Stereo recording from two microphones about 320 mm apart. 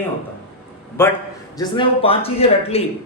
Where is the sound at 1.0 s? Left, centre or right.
Centre.